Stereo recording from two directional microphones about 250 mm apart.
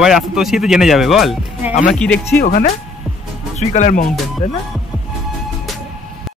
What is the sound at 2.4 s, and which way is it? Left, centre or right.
Speech, left.